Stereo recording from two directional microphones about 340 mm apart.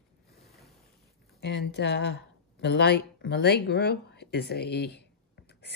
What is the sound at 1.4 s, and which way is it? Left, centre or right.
Speech, left.